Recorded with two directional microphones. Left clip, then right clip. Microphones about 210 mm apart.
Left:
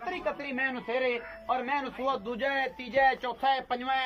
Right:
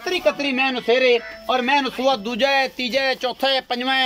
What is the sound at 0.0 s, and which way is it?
Speech, 50° right (ahead or behind).